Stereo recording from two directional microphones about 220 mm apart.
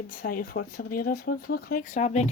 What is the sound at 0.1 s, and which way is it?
Speech, 40° left (ahead or behind).